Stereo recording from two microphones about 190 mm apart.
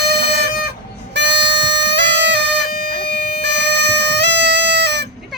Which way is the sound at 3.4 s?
65° right (ahead or behind).